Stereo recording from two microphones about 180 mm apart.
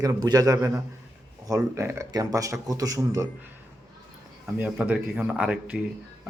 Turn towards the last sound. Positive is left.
turn(degrees=-5)  # may be behind; listen again after turning